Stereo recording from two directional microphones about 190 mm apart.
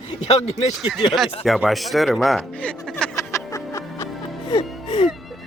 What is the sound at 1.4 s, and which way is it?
Speech, centre (ahead or behind).